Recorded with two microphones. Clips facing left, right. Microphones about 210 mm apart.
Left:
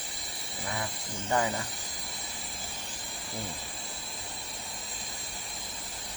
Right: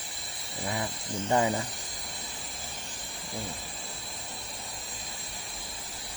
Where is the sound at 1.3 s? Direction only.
20° right (ahead or behind).